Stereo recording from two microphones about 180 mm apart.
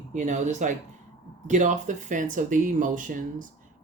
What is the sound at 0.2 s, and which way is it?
Speech, 40° right (ahead or behind).